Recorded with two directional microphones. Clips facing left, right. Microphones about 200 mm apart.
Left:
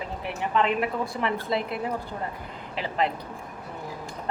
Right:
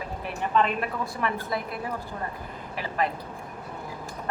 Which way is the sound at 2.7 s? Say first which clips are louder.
Left 2 dB; 20° left (ahead or behind).